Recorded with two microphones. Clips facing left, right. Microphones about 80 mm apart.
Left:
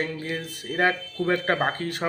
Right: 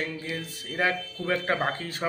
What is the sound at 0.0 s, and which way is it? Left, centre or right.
Speech, left.